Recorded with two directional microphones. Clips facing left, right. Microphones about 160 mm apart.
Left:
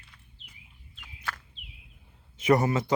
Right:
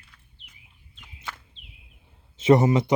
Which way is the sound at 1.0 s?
20° right (ahead or behind).